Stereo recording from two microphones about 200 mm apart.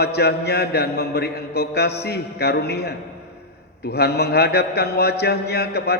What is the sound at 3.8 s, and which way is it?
A man's voice, 55° left (ahead or behind).